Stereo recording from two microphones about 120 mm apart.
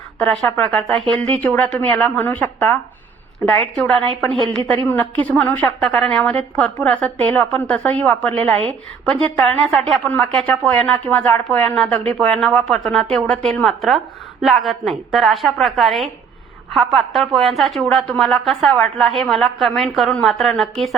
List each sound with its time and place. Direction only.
0.2 s a woman's voice: 10° left (ahead or behind)
4.3 s a woman's voice: 50° right (ahead or behind)
4.8 s a woman's voice: 10° left (ahead or behind)